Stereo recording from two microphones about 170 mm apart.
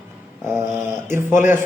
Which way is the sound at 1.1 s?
15° right (ahead or behind).